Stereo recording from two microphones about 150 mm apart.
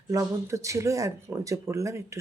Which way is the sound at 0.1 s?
20° right (ahead or behind).